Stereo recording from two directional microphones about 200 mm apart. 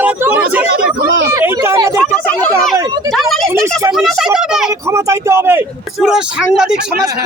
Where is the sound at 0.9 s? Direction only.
50° right (ahead or behind).